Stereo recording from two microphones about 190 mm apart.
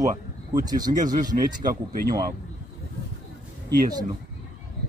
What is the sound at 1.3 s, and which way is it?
Speech, 20° right (ahead or behind).